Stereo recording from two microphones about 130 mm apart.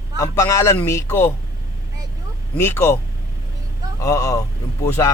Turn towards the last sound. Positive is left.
turn(degrees=25)  # may be behind; listen again after turning